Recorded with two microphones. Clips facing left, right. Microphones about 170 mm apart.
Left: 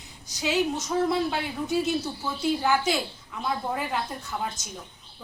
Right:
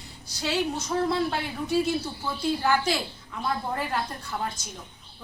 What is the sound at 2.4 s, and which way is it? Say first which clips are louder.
Speech: left 1 dB; 5° left (ahead or behind).